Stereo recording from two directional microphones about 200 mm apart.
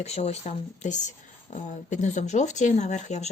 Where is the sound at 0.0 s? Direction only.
30° left (ahead or behind).